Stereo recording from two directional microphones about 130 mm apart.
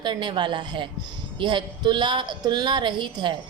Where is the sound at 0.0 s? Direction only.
35° right (ahead or behind).